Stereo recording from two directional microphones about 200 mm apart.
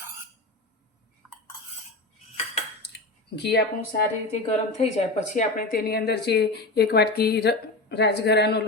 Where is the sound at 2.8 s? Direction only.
60° left (ahead or behind).